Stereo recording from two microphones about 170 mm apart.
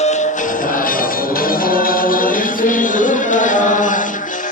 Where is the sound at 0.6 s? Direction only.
55° left (ahead or behind).